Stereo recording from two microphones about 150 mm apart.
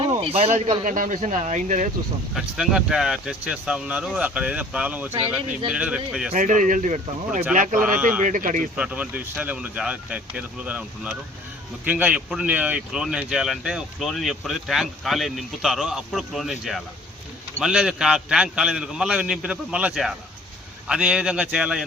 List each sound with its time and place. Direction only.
0.0 s a man's voice: 40° right (ahead or behind)
2.3 s speech: centre (ahead or behind)
6.3 s speech: 60° right (ahead or behind)
8.7 s speech: 10° right (ahead or behind)